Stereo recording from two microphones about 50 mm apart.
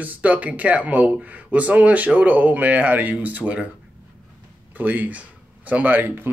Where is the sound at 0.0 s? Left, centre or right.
Right.